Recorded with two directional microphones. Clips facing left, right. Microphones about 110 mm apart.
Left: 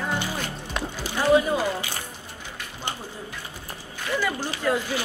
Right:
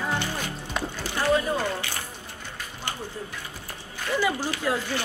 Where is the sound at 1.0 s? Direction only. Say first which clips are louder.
Left 4 dB; 15° left (ahead or behind).